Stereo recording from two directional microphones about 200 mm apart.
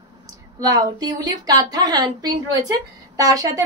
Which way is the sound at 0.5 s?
20° right (ahead or behind).